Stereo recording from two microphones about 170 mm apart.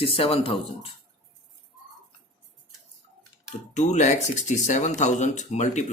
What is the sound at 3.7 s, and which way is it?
Speech, 45° left (ahead or behind).